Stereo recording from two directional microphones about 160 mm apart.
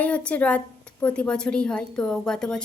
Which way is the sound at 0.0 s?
10° left (ahead or behind).